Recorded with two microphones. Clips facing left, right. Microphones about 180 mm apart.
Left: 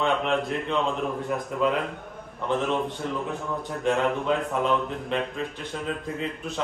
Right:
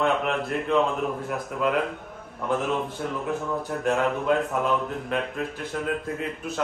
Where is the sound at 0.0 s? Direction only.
5° right (ahead or behind).